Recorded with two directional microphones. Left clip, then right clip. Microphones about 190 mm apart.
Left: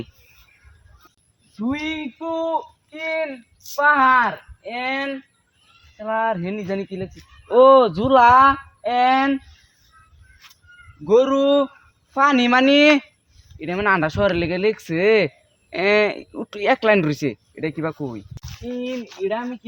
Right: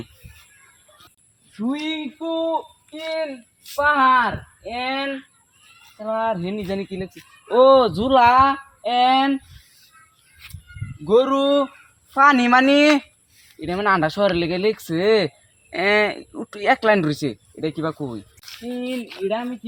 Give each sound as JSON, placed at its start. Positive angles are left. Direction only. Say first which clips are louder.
{"t": 1.5, "sound": "speech", "louder": "even", "side_deg": -10}
{"t": 1.9, "sound": "speech", "louder": "even", "side_deg": 0}
{"t": 11.0, "sound": "speech", "louder": "left 1 dB", "side_deg": 10}
{"t": 13.6, "sound": "speech", "louder": "even", "side_deg": 10}
{"t": 15.7, "sound": "speech", "louder": "left 1 dB", "side_deg": 35}
{"t": 18.4, "sound": "speech", "louder": "left 1 dB", "side_deg": 5}